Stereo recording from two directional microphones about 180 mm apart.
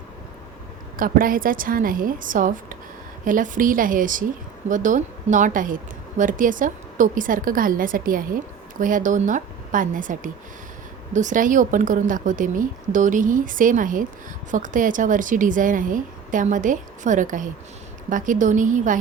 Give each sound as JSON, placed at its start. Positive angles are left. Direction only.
{"t": 0.9, "sound": "a woman's voice", "side_deg": -50}